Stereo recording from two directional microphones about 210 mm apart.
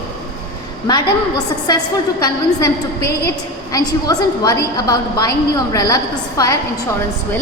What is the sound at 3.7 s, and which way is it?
A woman's voice, 20° left (ahead or behind).